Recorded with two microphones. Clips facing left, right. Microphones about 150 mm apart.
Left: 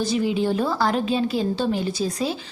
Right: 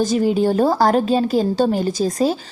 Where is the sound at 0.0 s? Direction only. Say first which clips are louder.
Right 5 dB; 45° right (ahead or behind).